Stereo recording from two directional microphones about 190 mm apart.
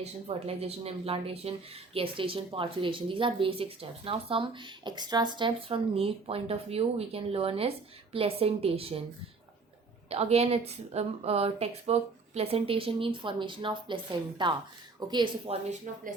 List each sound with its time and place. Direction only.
0.0 s a woman's voice: 30° right (ahead or behind)
10.1 s a woman's voice: 35° right (ahead or behind)